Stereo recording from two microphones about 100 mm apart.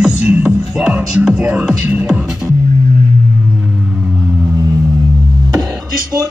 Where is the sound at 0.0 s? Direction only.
10° right (ahead or behind).